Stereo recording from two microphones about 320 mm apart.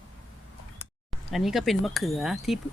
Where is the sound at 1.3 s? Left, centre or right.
Centre.